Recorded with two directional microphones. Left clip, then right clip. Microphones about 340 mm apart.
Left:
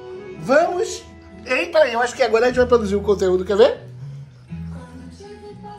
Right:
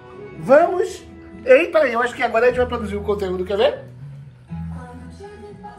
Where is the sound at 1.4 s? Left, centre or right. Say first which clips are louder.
Right 3 dB; centre.